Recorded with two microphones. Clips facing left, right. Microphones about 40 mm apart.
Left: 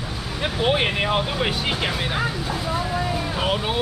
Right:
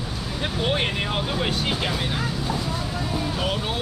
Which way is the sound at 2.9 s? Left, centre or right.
Centre.